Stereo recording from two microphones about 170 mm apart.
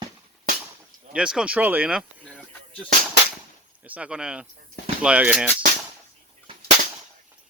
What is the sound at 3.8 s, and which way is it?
Speech, 10° right (ahead or behind).